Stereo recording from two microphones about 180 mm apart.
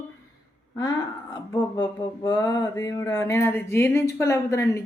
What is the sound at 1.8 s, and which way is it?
Speech, 25° left (ahead or behind).